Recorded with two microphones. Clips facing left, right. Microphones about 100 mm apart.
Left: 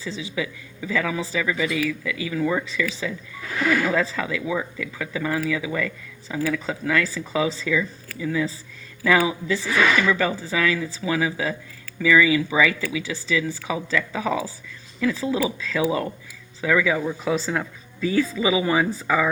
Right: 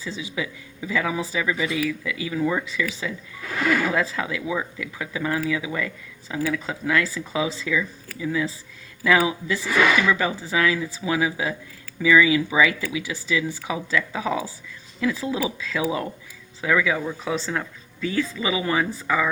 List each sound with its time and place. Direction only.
0.0 s speech: 5° right (ahead or behind)
3.8 s speech: 5° right (ahead or behind)